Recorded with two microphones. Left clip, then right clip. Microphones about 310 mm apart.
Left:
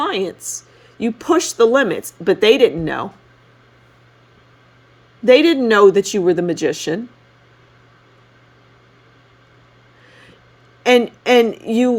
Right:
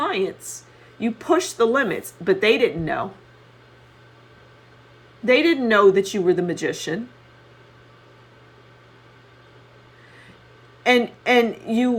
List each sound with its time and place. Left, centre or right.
0.0 s a woman's voice: left
5.2 s speech: left
11.2 s speech: left